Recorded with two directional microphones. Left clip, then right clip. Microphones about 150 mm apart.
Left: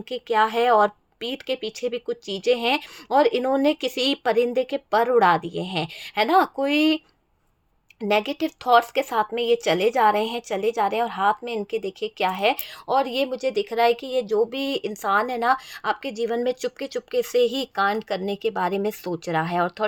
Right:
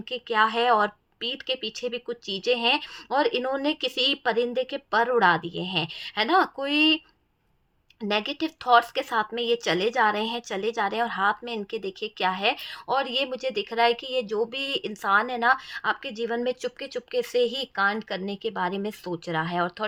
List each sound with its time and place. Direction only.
0.1 s speech: 25° left (ahead or behind)
8.0 s speech: 25° left (ahead or behind)